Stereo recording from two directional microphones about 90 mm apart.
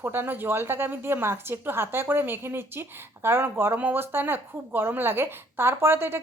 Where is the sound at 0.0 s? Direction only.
25° right (ahead or behind).